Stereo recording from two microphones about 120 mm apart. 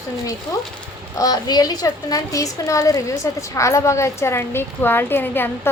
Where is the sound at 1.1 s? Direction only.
30° left (ahead or behind).